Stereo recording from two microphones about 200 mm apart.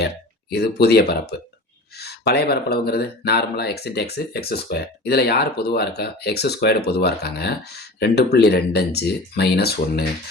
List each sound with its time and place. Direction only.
0.5 s speech: 55° left (ahead or behind)